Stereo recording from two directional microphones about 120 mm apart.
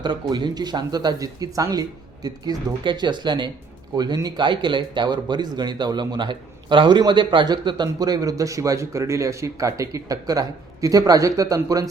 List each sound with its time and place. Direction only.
0.0 s speech: 35° right (ahead or behind)